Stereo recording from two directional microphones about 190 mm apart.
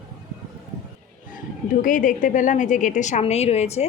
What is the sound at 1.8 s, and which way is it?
A woman's voice, 45° left (ahead or behind).